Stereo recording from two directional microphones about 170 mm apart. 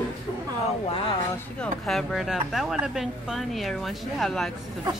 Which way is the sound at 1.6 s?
Centre (ahead or behind).